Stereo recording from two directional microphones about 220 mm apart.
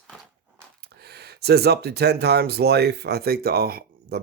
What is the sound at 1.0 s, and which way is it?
Speech, 45° right (ahead or behind).